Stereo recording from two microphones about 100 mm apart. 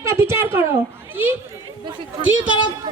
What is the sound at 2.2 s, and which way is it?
Speech, 15° right (ahead or behind).